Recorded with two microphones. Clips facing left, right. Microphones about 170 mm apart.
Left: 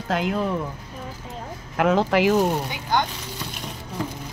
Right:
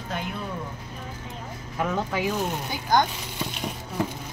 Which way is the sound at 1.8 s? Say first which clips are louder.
Left 8 dB; 75° left (ahead or behind).